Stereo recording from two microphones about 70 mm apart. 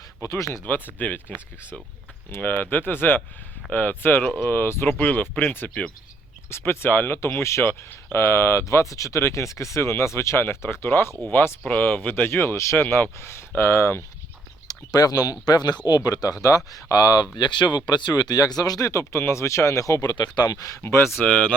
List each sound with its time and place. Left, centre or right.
0.2 s speech: left
0.6 s speech: left
2.4 s speech: left
6.5 s speech: left
7.7 s speech: left
8.2 s speech: left
14.7 s speech: left
15.9 s speech: left
17.3 s speech: left
20.8 s speech: left
21.2 s speech: centre